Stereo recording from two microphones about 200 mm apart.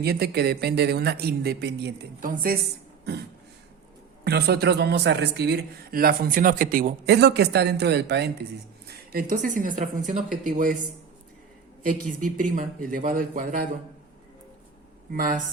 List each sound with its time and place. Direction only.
0.0 s a man's voice: 50° right (ahead or behind)
2.3 s a man's voice: 45° right (ahead or behind)
4.2 s a man's voice: 55° right (ahead or behind)
8.9 s a woman's voice: 45° right (ahead or behind)
11.8 s a man's voice: 40° right (ahead or behind)
15.1 s a man's voice: 45° right (ahead or behind)